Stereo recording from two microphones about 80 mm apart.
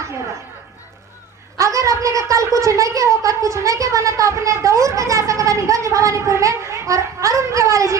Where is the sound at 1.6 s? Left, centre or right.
Right.